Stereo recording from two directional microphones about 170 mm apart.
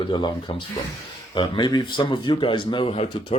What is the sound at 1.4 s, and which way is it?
A man's voice, 25° left (ahead or behind).